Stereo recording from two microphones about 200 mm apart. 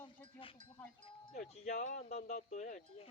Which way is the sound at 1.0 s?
35° left (ahead or behind).